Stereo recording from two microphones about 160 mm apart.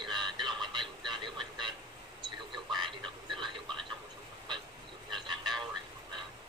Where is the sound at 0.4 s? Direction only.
30° right (ahead or behind).